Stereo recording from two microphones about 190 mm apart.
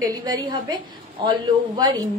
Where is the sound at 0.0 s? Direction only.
20° right (ahead or behind).